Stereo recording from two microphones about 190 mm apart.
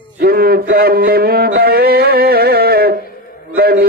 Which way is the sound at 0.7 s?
55° right (ahead or behind).